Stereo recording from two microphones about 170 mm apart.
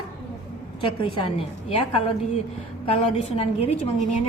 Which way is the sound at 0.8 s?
30° left (ahead or behind).